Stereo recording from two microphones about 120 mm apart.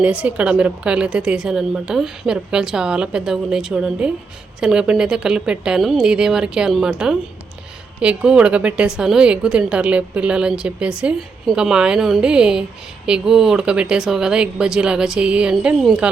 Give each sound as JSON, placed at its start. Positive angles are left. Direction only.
{"t": 0.0, "sound": "a woman's voice", "side_deg": -10}